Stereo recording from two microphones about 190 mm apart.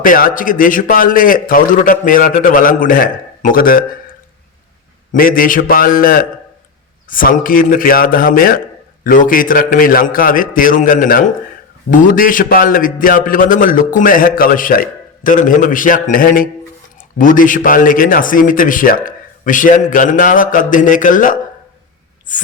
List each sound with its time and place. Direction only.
0.0 s a man's voice: 45° left (ahead or behind)
5.1 s a man's voice: 50° left (ahead or behind)